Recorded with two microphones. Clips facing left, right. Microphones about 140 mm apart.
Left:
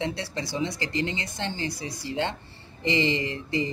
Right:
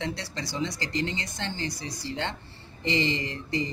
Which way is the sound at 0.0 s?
20° left (ahead or behind).